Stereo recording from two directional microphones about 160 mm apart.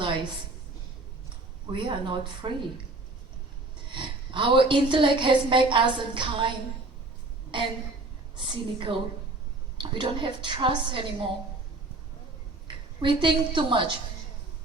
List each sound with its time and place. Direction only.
0.0 s a sound: 30° right (ahead or behind)
1.7 s a woman's voice: 30° right (ahead or behind)
3.9 s a woman's voice: 30° right (ahead or behind)
7.5 s a woman's voice: 30° right (ahead or behind)
12.6 s a woman's voice: 30° right (ahead or behind)